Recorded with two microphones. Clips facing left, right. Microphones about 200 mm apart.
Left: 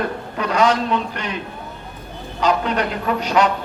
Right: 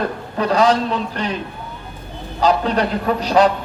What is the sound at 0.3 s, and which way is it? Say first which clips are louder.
Speech: right 3 dB; 35° right (ahead or behind).